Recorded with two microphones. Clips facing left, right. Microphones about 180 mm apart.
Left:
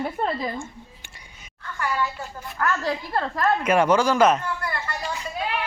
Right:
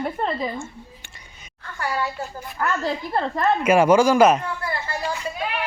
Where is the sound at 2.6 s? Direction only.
20° right (ahead or behind).